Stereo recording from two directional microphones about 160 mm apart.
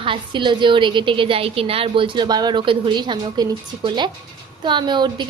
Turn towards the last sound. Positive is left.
turn(degrees=-30)  # may be behind; listen again after turning